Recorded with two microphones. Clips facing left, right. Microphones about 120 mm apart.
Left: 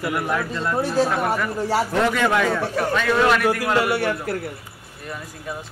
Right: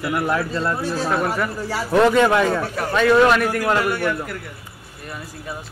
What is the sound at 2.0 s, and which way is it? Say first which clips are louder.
Speech: right 4 dB; 25° right (ahead or behind).